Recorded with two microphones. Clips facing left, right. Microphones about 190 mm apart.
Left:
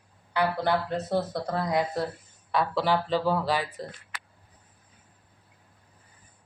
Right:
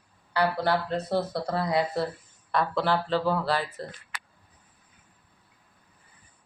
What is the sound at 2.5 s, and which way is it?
A woman's voice, 10° left (ahead or behind).